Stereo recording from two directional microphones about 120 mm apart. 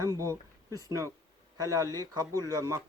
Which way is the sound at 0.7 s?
30° right (ahead or behind).